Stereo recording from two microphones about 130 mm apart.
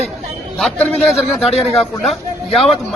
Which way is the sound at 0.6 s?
10° left (ahead or behind).